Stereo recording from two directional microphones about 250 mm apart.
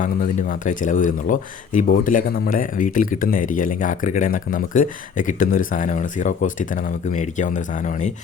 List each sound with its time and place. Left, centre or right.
0.0 s speech: left